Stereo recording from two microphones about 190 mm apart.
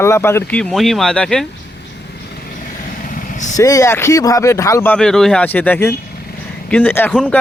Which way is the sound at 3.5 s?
20° left (ahead or behind).